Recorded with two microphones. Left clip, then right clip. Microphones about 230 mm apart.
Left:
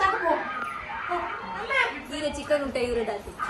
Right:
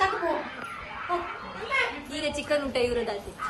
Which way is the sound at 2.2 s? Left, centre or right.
Centre.